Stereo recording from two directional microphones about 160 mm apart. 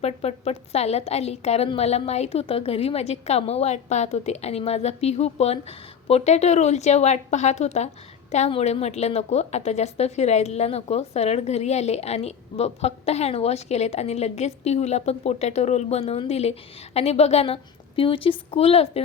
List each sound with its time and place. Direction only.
0.0 s a woman's voice: 40° left (ahead or behind)